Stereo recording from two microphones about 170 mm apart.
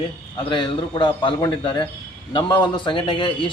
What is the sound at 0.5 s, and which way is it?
A man's voice, 25° left (ahead or behind).